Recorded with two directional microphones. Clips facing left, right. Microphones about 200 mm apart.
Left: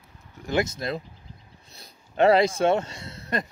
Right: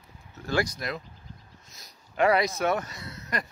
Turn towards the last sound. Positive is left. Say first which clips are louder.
# left 4 dB
turn(degrees=25)  # may be behind; listen again after turning